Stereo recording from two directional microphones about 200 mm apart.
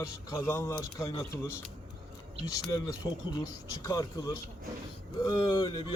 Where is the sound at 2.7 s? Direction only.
20° left (ahead or behind).